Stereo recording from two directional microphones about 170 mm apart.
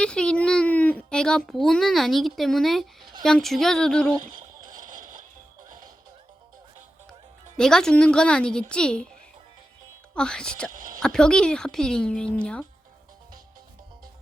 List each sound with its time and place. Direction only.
0.0 s a child's voice: 5° left (ahead or behind)
4.9 s music: 50° right (ahead or behind)
7.5 s a child's voice: 5° left (ahead or behind)
10.2 s a child's voice: 5° left (ahead or behind)
10.8 s speech: 50° right (ahead or behind)
11.0 s a child's voice: 5° left (ahead or behind)